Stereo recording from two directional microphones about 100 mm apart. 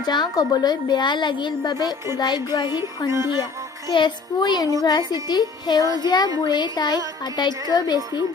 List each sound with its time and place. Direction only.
0.0 s a woman's voice: 45° left (ahead or behind)